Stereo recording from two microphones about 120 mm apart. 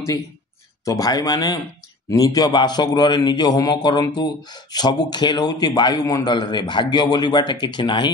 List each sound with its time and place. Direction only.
0.8 s a man's voice: 30° left (ahead or behind)